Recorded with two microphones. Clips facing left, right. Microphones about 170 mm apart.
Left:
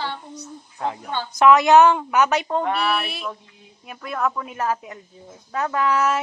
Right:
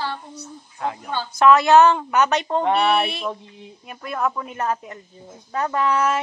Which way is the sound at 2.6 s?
25° right (ahead or behind).